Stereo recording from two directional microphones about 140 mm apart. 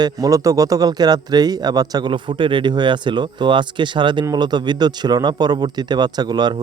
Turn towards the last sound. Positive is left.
turn(degrees=-30)  # may be behind; listen again after turning